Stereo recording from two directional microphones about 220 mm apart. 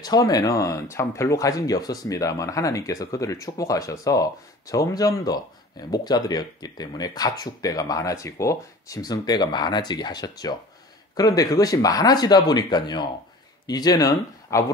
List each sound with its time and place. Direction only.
0.0 s speech: 15° left (ahead or behind)